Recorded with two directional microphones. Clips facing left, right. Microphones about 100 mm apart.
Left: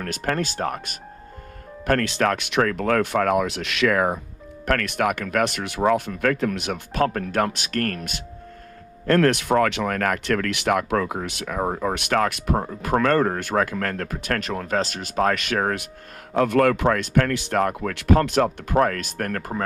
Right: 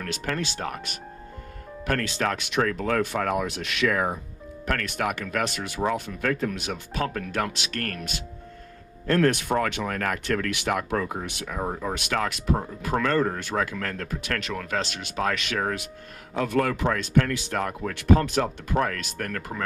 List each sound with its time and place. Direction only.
0.0 s speech: 45° left (ahead or behind)
2.0 s speech: 65° left (ahead or behind); by 8.1 s 40° left (ahead or behind)
9.0 s speech: 70° left (ahead or behind)
17.9 s speech: 65° left (ahead or behind); by 19.6 s 40° left (ahead or behind)